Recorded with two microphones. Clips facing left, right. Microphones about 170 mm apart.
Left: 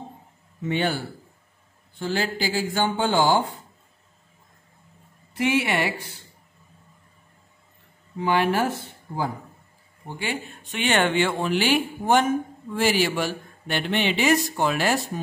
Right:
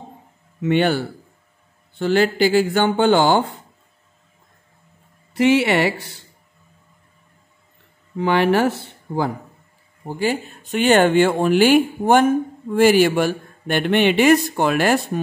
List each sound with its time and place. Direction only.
0.6 s speech: 70° right (ahead or behind)
5.3 s speech: 75° right (ahead or behind)
8.2 s speech: 70° right (ahead or behind)
10.0 s speech: 40° right (ahead or behind); by 15.0 s 60° right (ahead or behind)